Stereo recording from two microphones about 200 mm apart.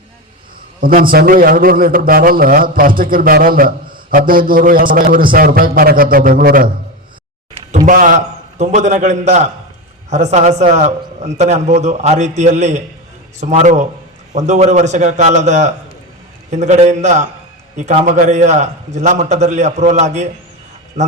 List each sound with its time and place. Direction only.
0.8 s a man's voice: 45° right (ahead or behind)
7.9 s a man's voice: 40° right (ahead or behind)